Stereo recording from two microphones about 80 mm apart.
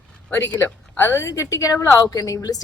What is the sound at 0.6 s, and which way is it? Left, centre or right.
A woman's voice, left.